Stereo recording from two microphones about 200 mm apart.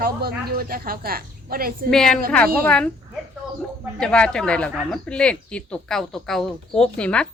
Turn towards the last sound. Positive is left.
turn(degrees=5)  # may be behind; listen again after turning